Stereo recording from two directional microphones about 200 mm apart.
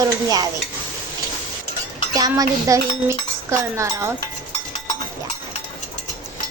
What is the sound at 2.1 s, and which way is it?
Speech, 20° right (ahead or behind).